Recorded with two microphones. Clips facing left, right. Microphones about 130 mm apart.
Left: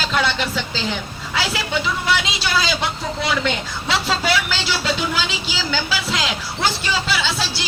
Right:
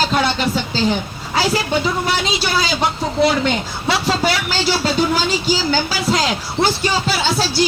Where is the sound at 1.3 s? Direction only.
40° right (ahead or behind).